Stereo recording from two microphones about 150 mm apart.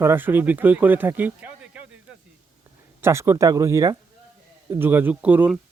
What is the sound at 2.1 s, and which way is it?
Snake, 5° right (ahead or behind).